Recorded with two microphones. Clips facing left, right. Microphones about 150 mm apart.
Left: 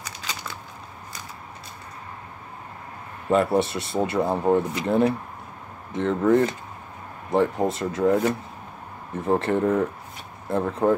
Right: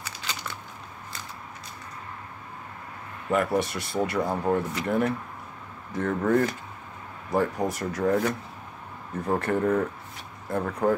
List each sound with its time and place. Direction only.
3.3 s speech: 25° left (ahead or behind)